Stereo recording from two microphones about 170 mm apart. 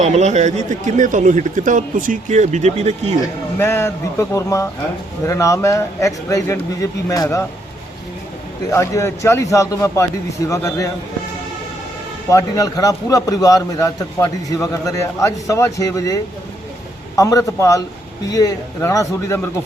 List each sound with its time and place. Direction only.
0.0 s speech: 40° right (ahead or behind)
3.6 s a man's voice: 15° left (ahead or behind)
8.7 s a man's voice: 15° left (ahead or behind)
12.3 s a man's voice: 20° left (ahead or behind)